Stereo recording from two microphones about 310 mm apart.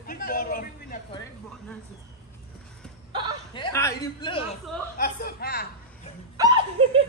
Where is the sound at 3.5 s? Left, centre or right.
Centre.